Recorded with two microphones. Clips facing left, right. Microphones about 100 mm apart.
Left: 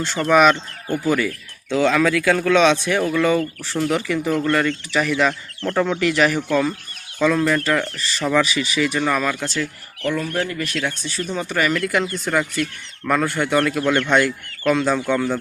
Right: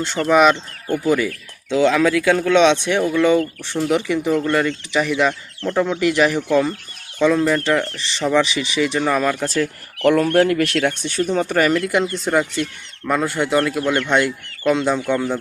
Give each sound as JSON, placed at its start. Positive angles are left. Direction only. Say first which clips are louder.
{"t": 0.3, "sound": "a man's voice", "louder": "even", "side_deg": -20}
{"t": 3.0, "sound": "speech", "louder": "right 2 dB", "side_deg": 0}
{"t": 3.8, "sound": "a man's voice", "louder": "right 2 dB", "side_deg": -15}
{"t": 9.3, "sound": "speech", "louder": "right 4 dB", "side_deg": -45}
{"t": 10.0, "sound": "speech", "louder": "right 8 dB", "side_deg": -70}
{"t": 10.8, "sound": "speech", "louder": "right 5 dB", "side_deg": -60}
{"t": 11.3, "sound": "speech", "louder": "right 3 dB", "side_deg": -45}
{"t": 11.8, "sound": "speech", "louder": "right 2 dB", "side_deg": -25}
{"t": 13.1, "sound": "a man's voice", "louder": "right 1 dB", "side_deg": -15}